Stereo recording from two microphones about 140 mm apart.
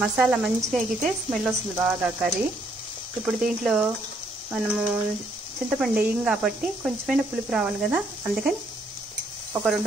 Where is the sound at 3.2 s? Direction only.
5° right (ahead or behind).